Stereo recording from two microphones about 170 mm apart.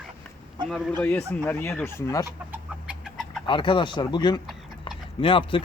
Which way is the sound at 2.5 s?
5° right (ahead or behind).